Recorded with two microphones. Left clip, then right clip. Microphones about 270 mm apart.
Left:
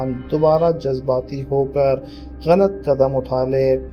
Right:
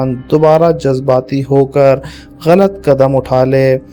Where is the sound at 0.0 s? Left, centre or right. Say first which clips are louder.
Right 7 dB; right.